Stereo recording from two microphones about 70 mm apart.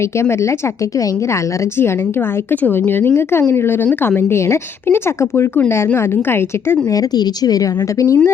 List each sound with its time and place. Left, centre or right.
0.2 s speech: left
2.5 s speech: left
6.9 s a woman's voice: left